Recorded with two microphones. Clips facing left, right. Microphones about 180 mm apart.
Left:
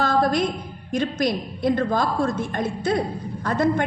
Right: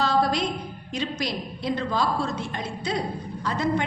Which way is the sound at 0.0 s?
50° left (ahead or behind).